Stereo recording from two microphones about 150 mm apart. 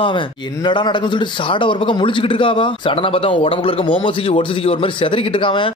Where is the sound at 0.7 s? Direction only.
30° left (ahead or behind).